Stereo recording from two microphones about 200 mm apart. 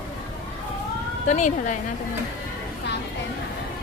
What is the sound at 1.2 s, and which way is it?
Speech, 35° left (ahead or behind).